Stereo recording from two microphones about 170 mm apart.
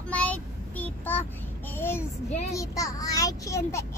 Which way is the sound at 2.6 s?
20° left (ahead or behind).